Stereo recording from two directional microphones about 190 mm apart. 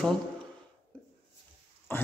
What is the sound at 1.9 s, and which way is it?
Speech, 10° left (ahead or behind).